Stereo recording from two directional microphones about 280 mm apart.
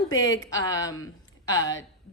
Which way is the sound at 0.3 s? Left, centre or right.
Centre.